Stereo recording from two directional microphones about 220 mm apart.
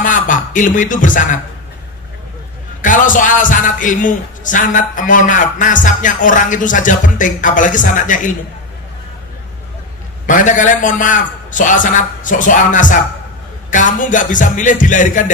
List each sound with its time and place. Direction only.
0.0 s speech: 35° left (ahead or behind)
2.8 s a man's voice: 35° left (ahead or behind)
10.2 s a man's voice: 35° left (ahead or behind)